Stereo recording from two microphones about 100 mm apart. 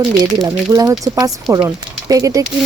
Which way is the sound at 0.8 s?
35° right (ahead or behind).